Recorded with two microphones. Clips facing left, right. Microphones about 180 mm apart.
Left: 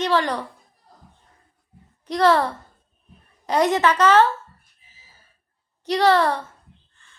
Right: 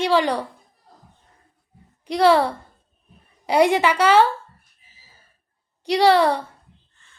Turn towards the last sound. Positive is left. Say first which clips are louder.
# right 2 dB
turn(degrees=-10)  # may be behind; listen again after turning